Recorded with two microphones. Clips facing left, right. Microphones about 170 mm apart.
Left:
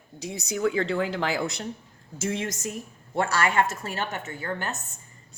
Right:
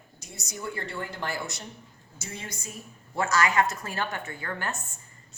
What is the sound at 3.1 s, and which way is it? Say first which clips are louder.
A woman's voice: left 1 dB; 30° left (ahead or behind).